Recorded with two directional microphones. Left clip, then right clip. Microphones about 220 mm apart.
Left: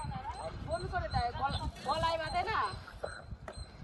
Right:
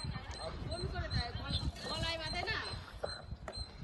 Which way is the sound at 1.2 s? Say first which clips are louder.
Left 8 dB; 20° left (ahead or behind).